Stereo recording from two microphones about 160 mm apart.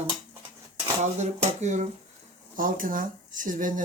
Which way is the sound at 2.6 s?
60° right (ahead or behind).